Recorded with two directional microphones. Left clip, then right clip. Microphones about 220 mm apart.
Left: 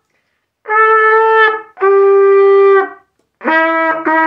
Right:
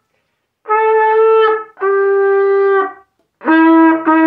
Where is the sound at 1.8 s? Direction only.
40° left (ahead or behind).